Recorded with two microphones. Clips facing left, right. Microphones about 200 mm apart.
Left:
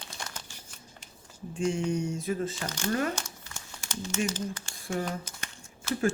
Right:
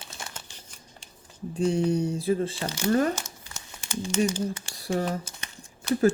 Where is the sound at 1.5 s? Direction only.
35° right (ahead or behind).